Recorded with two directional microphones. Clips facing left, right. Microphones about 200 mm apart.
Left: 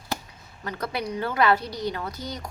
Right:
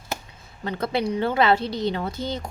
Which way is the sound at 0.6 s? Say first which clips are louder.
Right 5 dB; 25° right (ahead or behind).